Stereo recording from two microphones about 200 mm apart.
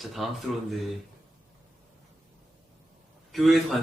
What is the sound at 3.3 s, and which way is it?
Speech, centre (ahead or behind).